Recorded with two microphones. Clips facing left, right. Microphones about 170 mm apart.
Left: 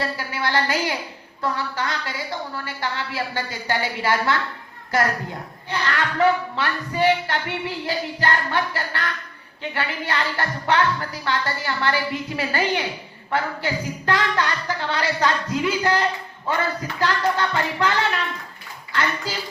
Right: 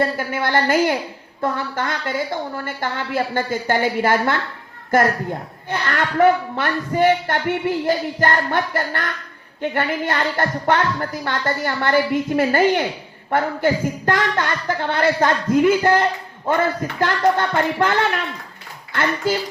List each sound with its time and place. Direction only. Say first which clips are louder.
0.0 s a child's voice: right 5 dB; 50° right (ahead or behind)